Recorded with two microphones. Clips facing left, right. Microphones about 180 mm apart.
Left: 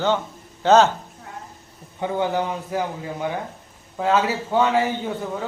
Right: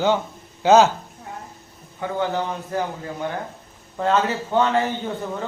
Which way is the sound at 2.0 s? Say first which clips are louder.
Left 1 dB; 15° left (ahead or behind).